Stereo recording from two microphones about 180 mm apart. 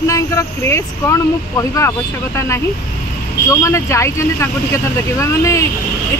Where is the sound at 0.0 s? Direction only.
15° left (ahead or behind).